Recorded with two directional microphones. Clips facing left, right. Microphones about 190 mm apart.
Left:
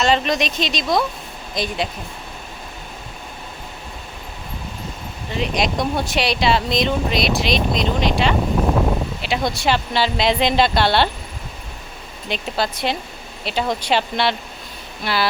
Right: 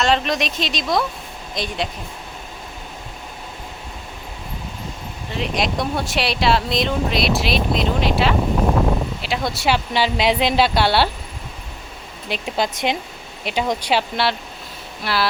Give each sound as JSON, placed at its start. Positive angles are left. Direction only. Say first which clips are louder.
{"t": 0.0, "sound": "speech", "louder": "left 1 dB", "side_deg": 0}
{"t": 5.3, "sound": "speech", "louder": "left 1 dB", "side_deg": 0}
{"t": 12.3, "sound": "speech", "louder": "even", "side_deg": -15}